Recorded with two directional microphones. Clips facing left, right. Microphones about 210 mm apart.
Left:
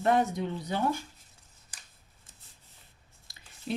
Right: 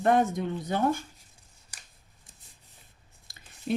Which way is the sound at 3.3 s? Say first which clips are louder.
Right 5 dB; 50° right (ahead or behind).